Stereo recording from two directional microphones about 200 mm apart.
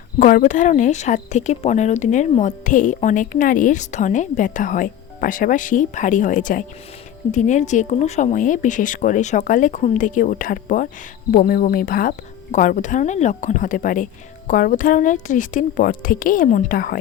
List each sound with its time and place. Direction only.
0.2 s speech: 40° left (ahead or behind)